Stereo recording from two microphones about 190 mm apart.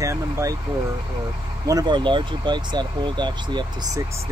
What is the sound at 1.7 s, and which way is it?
Speech, 20° right (ahead or behind).